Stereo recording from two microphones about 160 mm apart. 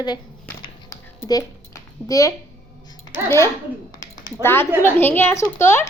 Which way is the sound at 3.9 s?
25° left (ahead or behind).